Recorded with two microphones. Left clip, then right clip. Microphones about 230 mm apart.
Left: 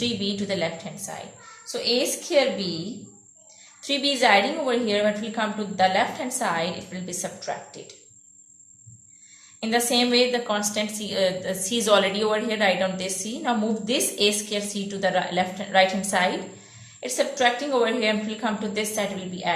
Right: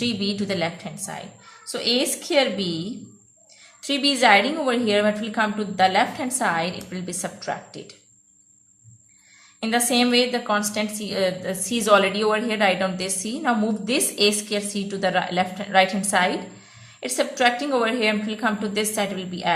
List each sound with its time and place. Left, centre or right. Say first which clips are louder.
0.0 s a woman's voice: right 1 dB; right
3.8 s a woman's voice: right 2 dB; right
9.6 s a woman's voice: right 1 dB; right